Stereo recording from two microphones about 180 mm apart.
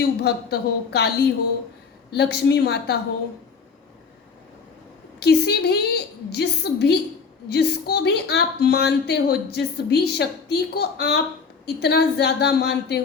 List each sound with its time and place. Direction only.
0.0 s speech: 65° left (ahead or behind)
2.1 s speech: 65° left (ahead or behind)
5.2 s speech: 65° left (ahead or behind)